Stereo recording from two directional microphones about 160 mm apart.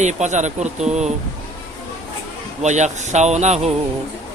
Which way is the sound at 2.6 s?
50° right (ahead or behind).